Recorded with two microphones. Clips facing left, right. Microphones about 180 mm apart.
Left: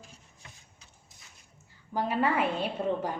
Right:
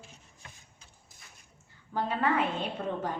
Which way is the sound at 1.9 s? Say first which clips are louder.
Left 1 dB; 10° left (ahead or behind).